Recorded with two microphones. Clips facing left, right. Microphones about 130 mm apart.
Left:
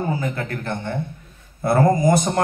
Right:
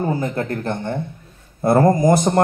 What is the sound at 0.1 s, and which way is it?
Speech, 45° right (ahead or behind).